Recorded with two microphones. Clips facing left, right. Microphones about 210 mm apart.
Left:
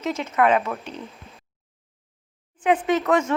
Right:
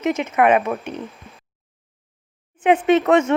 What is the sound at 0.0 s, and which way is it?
Speech, 20° right (ahead or behind).